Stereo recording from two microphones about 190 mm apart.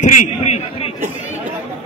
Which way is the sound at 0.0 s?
40° left (ahead or behind).